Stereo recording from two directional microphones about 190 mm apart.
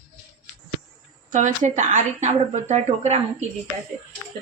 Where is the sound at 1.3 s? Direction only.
40° right (ahead or behind).